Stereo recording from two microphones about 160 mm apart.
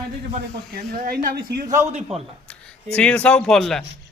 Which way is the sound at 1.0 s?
70° right (ahead or behind).